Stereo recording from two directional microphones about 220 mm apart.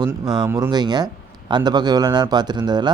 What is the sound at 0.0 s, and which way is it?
Speech, 15° right (ahead or behind).